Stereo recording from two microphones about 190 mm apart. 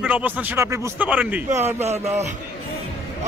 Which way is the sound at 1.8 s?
35° right (ahead or behind).